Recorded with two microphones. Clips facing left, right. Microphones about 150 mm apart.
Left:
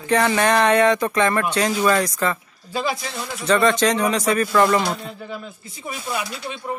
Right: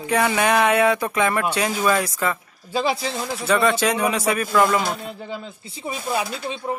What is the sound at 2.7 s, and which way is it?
Speech, 30° right (ahead or behind).